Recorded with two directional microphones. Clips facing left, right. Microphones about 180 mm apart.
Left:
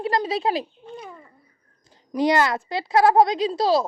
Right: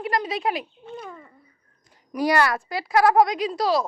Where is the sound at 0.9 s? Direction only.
5° left (ahead or behind).